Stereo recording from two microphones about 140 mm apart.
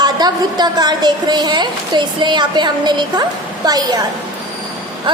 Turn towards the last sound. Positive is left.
turn(degrees=-30)  # may be behind; listen again after turning